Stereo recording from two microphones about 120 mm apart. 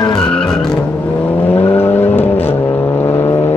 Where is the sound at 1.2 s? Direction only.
15° left (ahead or behind).